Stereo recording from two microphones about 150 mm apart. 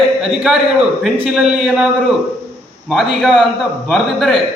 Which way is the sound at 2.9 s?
Centre (ahead or behind).